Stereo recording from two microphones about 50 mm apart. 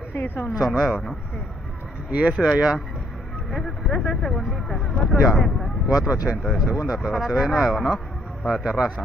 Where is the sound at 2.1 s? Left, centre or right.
Right.